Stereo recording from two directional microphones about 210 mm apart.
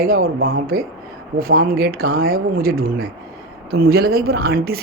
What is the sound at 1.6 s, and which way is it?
Speech, 45° right (ahead or behind).